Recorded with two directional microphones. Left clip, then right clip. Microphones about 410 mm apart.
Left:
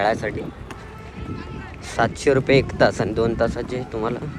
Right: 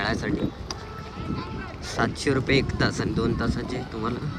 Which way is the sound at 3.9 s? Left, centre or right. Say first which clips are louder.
Left 6 dB; centre.